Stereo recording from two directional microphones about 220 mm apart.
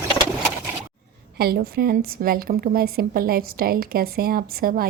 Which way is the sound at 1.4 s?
45° right (ahead or behind).